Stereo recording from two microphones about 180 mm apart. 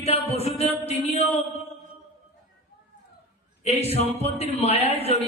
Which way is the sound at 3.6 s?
35° left (ahead or behind).